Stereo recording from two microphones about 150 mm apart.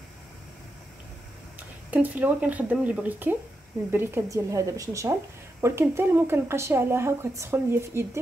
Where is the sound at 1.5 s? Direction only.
10° right (ahead or behind).